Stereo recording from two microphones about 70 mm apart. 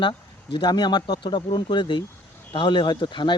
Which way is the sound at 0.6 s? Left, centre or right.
Left.